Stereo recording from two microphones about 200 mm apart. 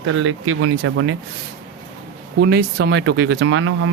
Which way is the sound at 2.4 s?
55° right (ahead or behind).